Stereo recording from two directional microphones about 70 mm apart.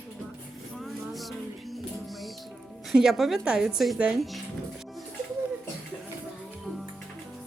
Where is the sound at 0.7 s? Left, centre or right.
Centre.